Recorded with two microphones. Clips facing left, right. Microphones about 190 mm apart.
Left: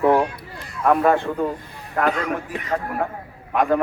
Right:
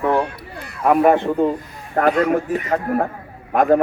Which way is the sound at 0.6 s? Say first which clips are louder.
Even; 65° right (ahead or behind).